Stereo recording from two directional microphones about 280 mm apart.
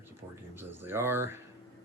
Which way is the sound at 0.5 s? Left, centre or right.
Centre.